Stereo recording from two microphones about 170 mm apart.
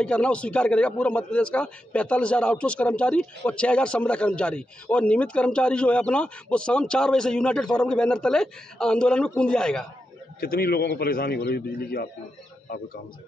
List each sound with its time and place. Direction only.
0.0 s a man's voice: 5° left (ahead or behind)
10.4 s a man's voice: 65° left (ahead or behind)